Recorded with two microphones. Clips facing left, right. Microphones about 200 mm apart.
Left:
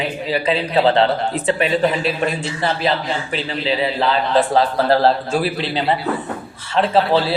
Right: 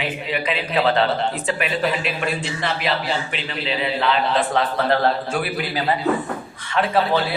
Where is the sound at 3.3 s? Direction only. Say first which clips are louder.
Left 5 dB; 35° left (ahead or behind).